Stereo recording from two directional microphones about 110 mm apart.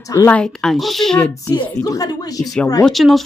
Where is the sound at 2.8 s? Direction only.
Centre (ahead or behind).